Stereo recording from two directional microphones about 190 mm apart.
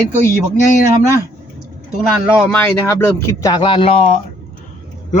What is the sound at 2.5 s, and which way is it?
Speech, 10° left (ahead or behind).